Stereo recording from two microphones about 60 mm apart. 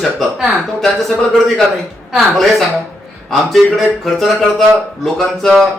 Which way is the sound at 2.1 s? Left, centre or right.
Centre.